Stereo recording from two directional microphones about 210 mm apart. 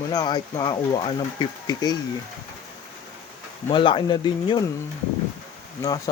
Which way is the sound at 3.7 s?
25° left (ahead or behind).